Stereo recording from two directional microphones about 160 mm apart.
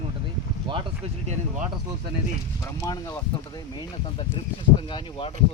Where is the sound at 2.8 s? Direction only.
20° left (ahead or behind).